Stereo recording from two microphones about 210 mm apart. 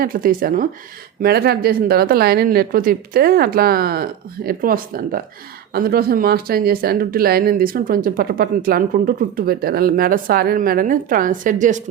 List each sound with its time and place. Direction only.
0.0 s speech: 45° right (ahead or behind)